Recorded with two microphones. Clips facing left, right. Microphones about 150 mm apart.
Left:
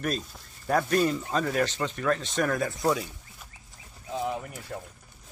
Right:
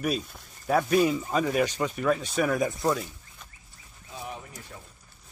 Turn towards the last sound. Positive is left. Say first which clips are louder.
# left 7 dB
turn(degrees=75)  # may be behind; listen again after turning